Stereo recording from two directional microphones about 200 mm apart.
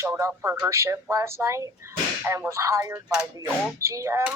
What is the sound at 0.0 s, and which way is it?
A man's voice, 15° right (ahead or behind).